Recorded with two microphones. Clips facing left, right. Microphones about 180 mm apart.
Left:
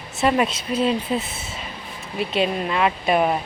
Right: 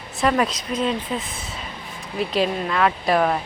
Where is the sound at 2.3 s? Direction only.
15° left (ahead or behind).